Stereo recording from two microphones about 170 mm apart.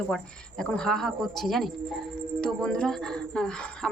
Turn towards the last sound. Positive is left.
turn(degrees=5)  # may be behind; listen again after turning